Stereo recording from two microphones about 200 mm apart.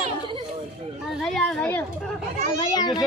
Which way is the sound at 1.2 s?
5° left (ahead or behind).